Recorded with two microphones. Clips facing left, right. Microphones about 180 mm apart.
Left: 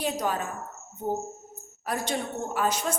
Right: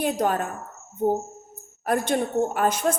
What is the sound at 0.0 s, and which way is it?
Speech, 55° right (ahead or behind).